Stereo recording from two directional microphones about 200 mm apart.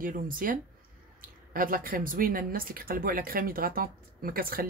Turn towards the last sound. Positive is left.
turn(degrees=-45)  # may be behind; listen again after turning